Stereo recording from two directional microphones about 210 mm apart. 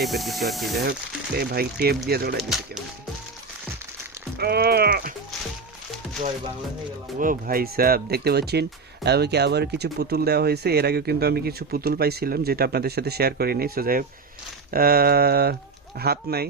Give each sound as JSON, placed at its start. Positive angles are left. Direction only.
{"t": 0.0, "sound": "speech", "side_deg": 0}
{"t": 1.4, "sound": "speech", "side_deg": -50}
{"t": 2.4, "sound": "speech", "side_deg": 0}
{"t": 4.4, "sound": "speech", "side_deg": -50}
{"t": 7.2, "sound": "speech", "side_deg": -40}